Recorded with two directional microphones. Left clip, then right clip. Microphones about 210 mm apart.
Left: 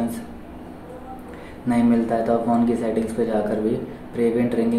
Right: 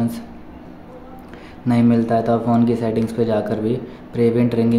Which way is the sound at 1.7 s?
45° right (ahead or behind).